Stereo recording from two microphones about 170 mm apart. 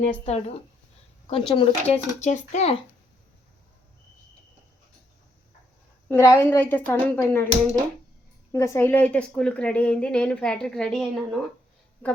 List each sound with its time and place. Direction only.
0.0 s speech: 45° left (ahead or behind)
6.1 s a woman's voice: 15° left (ahead or behind)
8.5 s a woman's voice: 15° left (ahead or behind)